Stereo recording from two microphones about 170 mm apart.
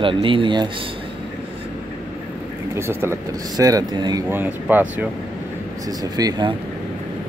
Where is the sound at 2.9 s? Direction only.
15° right (ahead or behind).